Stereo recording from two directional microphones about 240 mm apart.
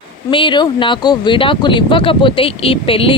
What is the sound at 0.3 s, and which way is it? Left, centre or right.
Speech, left.